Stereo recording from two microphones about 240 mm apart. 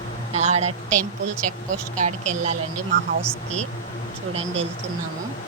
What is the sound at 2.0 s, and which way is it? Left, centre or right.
Speech, right.